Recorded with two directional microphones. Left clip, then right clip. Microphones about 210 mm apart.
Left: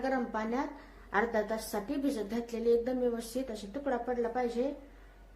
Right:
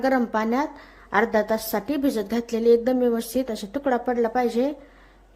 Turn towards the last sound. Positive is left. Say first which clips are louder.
# right 10 dB
turn(degrees=-50)  # may be behind; listen again after turning